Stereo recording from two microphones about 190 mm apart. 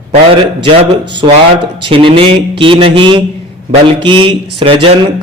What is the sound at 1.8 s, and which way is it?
A man's voice, 30° right (ahead or behind).